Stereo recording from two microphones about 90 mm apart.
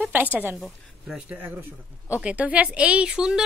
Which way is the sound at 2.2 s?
15° right (ahead or behind).